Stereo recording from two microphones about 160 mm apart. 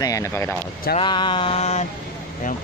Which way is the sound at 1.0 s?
30° left (ahead or behind).